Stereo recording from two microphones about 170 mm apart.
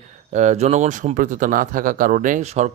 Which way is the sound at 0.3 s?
45° right (ahead or behind).